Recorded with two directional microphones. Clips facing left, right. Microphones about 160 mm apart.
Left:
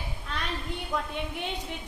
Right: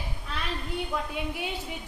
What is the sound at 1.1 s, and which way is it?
Speech, 5° right (ahead or behind).